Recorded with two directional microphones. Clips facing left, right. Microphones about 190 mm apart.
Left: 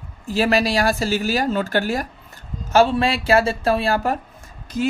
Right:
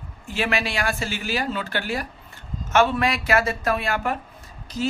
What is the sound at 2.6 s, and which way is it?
Speech, 30° left (ahead or behind).